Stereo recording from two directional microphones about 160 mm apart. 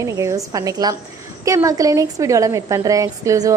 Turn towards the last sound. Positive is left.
turn(degrees=-20)  # may be behind; listen again after turning